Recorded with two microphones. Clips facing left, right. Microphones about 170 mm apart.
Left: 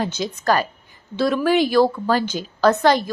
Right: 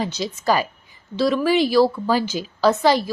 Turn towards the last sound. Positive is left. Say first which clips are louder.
# left 1 dB
turn(degrees=0)  # may be behind; listen again after turning